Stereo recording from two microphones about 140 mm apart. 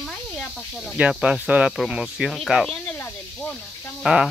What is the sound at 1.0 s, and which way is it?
Speech, 10° right (ahead or behind).